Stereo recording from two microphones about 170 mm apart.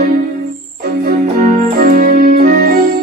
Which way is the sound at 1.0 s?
60° right (ahead or behind).